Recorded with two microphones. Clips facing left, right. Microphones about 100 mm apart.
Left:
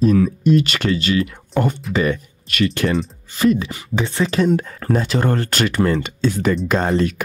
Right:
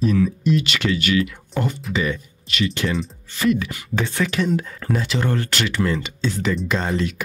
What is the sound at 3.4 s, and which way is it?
Speech, 35° left (ahead or behind).